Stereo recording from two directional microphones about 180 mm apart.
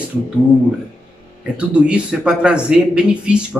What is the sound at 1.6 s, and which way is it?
A man's voice, 5° right (ahead or behind).